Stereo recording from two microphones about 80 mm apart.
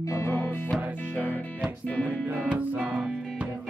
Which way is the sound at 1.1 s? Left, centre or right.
Centre.